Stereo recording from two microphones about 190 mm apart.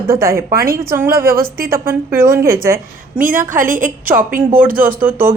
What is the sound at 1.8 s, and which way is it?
A woman's voice, 15° right (ahead or behind).